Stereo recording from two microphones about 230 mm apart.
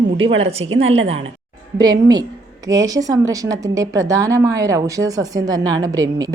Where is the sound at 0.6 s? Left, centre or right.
Right.